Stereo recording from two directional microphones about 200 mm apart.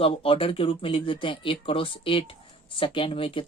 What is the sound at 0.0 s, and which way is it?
Speech, 25° left (ahead or behind).